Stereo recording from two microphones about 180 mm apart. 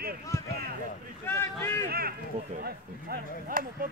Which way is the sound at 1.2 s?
15° left (ahead or behind).